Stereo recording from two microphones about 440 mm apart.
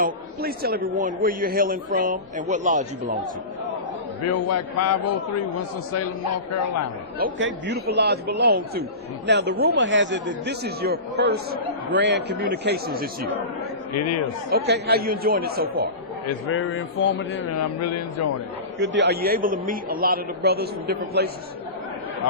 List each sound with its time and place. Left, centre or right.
0.0 s speech: right
4.2 s a man's voice: left
7.3 s speech: right
13.9 s a man's voice: left
14.5 s speech: right
16.2 s a man's voice: left
17.6 s a man's voice: left
18.8 s speech: right